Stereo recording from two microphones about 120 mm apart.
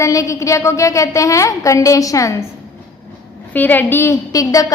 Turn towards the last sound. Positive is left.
turn(degrees=30)  # may be behind; listen again after turning